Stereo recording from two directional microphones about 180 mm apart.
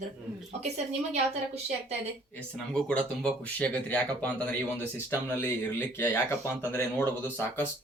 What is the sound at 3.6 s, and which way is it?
Speech, 10° left (ahead or behind).